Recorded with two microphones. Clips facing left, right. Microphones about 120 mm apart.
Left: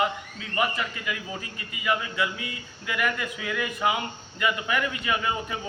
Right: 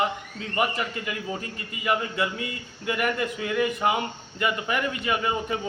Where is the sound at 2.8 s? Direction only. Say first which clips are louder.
Right 3 dB; 30° right (ahead or behind).